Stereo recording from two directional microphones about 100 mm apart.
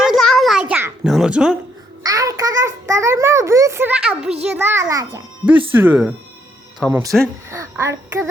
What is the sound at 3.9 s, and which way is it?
Speech, 10° right (ahead or behind).